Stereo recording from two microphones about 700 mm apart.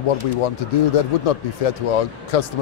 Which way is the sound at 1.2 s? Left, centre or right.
Left.